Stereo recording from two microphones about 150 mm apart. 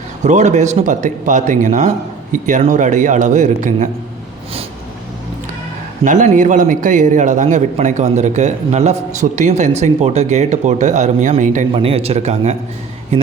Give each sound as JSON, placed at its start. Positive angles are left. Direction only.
{"t": 0.2, "sound": "a man's voice", "side_deg": -50}
{"t": 6.1, "sound": "a man's voice", "side_deg": -60}
{"t": 11.7, "sound": "a man's voice", "side_deg": -40}